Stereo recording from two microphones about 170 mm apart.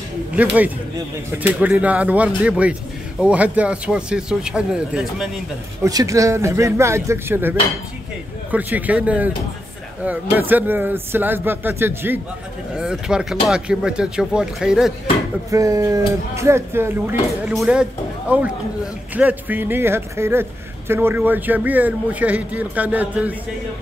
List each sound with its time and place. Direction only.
0.4 s a man's voice: 10° right (ahead or behind)
5.9 s a man's voice: 20° right (ahead or behind); by 14.9 s 5° right (ahead or behind)
15.5 s a man's voice: 20° right (ahead or behind)